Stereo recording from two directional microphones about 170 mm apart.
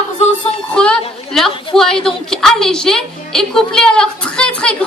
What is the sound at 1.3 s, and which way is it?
A woman's voice, centre (ahead or behind).